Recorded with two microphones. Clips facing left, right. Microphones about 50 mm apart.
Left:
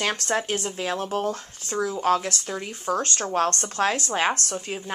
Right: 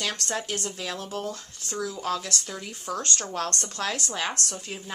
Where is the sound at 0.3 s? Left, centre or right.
Left.